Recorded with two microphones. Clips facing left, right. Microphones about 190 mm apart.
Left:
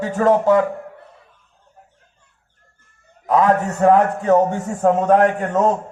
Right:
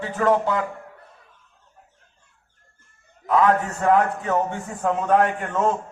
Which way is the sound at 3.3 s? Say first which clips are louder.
Left 3 dB; 40° left (ahead or behind).